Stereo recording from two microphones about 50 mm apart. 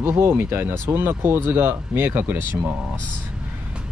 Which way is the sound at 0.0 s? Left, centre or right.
Right.